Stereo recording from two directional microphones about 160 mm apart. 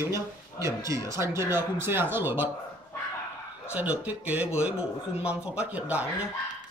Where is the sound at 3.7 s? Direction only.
10° right (ahead or behind).